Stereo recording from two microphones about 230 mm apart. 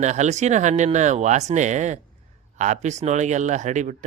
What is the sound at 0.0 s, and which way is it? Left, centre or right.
Speech, right.